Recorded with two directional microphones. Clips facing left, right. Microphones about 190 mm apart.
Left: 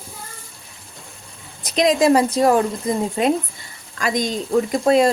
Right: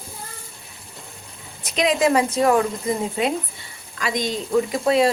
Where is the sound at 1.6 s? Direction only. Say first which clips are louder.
Left 3 dB; 40° left (ahead or behind).